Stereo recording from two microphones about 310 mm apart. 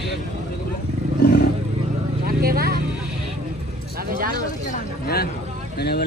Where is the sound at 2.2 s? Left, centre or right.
Right.